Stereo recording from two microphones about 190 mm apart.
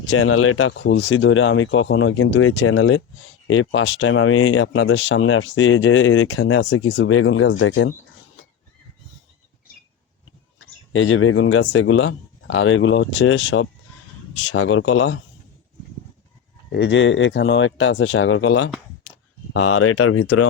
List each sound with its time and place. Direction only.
0.0 s speech: 85° left
10.6 s speech: 90° left
14.7 s speech: 90° left
16.7 s speech: 65° left (ahead or behind); by 18.5 s 90° left
19.5 s speech: 90° left